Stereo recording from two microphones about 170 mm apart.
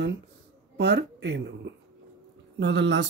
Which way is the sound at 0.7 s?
90° right.